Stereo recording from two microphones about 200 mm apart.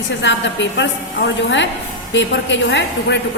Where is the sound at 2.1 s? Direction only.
65° left (ahead or behind).